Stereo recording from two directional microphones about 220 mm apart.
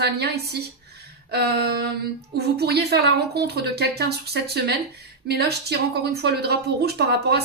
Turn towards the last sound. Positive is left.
turn(degrees=-45)  # may be behind; listen again after turning